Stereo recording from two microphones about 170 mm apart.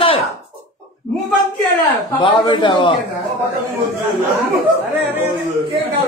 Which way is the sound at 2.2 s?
25° left (ahead or behind).